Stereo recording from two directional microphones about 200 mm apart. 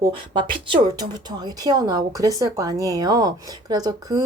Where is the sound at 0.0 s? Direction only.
20° right (ahead or behind).